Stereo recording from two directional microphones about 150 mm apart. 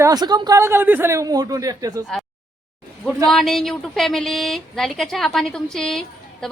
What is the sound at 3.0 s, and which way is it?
Speech, centre (ahead or behind).